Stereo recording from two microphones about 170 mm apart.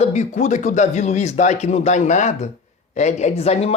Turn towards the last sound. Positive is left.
turn(degrees=35)  # may be behind; listen again after turning